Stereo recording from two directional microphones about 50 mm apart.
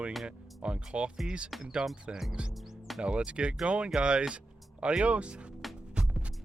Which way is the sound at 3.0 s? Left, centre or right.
Right.